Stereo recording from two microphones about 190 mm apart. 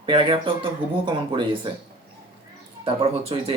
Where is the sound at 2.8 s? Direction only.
30° right (ahead or behind).